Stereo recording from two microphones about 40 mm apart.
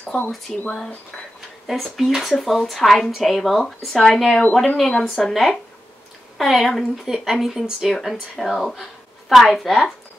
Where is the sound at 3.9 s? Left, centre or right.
Centre.